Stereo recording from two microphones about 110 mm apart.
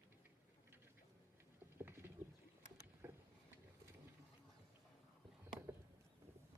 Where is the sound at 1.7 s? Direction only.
20° right (ahead or behind).